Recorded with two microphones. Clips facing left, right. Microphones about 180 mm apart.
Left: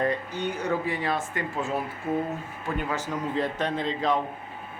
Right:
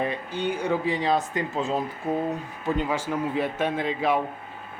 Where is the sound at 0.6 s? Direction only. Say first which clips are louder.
Right 2 dB; 15° right (ahead or behind).